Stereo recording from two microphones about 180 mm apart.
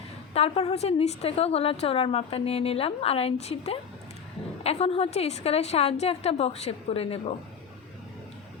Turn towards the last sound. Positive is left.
turn(degrees=30)  # may be behind; listen again after turning